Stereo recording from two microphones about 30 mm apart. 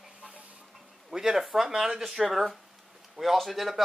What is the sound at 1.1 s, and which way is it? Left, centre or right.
Speech, centre.